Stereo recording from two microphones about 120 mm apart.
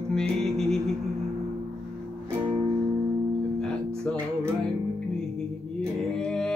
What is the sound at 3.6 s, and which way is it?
Music, 5° left (ahead or behind).